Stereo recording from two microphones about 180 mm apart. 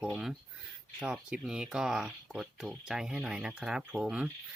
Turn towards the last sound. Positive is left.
turn(degrees=-5)  # may be behind; listen again after turning